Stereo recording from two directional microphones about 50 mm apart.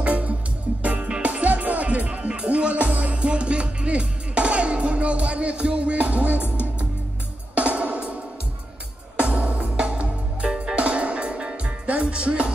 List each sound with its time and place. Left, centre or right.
0.0 s music: right
6.3 s music: left
7.5 s music: right
9.2 s music: right